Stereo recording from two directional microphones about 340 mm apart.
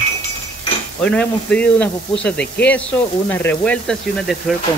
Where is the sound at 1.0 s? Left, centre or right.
Centre.